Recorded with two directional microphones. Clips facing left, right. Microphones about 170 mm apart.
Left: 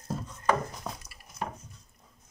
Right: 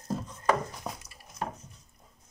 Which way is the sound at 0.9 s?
15° right (ahead or behind).